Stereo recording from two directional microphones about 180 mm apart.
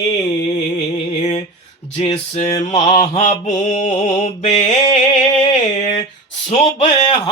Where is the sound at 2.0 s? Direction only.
35° left (ahead or behind).